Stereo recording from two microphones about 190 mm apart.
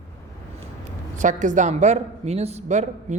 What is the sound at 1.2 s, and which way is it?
A woman's voice, 40° right (ahead or behind).